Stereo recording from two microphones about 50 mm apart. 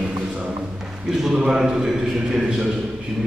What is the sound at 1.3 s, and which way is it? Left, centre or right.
Speech, centre.